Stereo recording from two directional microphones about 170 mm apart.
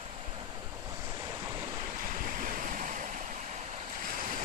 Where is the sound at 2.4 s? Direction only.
50° right (ahead or behind).